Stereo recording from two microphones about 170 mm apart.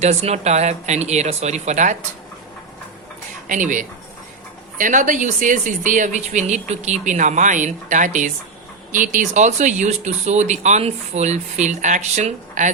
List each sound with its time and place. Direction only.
0.0 s speech: 40° right (ahead or behind)
3.4 s speech: 50° right (ahead or behind)